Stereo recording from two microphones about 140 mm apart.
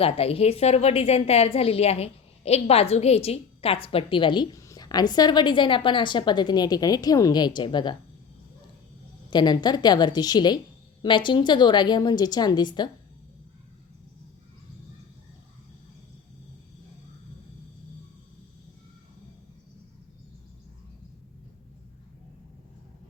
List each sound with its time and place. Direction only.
0.0 s a woman's voice: 45° left (ahead or behind)
9.3 s a woman's voice: 30° left (ahead or behind)